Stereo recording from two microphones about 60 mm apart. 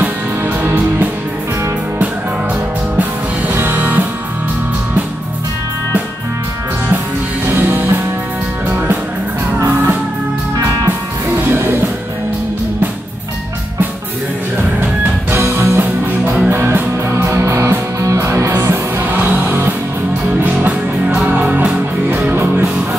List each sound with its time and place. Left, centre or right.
0.7 s music: right
3.0 s music: right
7.4 s music: right
10.9 s music: right
15.3 s music: right
19.1 s music: right
20.4 s music: right